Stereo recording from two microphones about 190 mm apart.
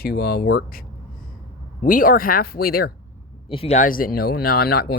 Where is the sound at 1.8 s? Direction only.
45° left (ahead or behind).